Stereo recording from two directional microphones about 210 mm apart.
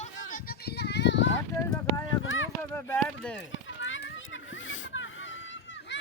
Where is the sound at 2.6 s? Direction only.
10° left (ahead or behind).